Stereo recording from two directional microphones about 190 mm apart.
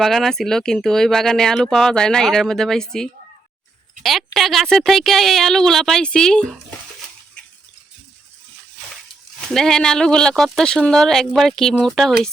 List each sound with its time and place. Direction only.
0.0 s speech: centre (ahead or behind)
4.4 s speech: centre (ahead or behind)
9.5 s speech: 5° left (ahead or behind)